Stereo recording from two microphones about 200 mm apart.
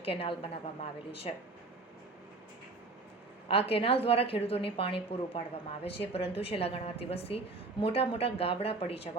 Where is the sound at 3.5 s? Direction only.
30° left (ahead or behind).